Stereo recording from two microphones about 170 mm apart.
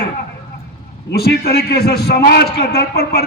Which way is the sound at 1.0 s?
70° left (ahead or behind).